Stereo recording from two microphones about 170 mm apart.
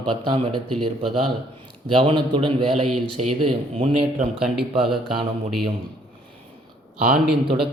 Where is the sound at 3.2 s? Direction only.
40° right (ahead or behind).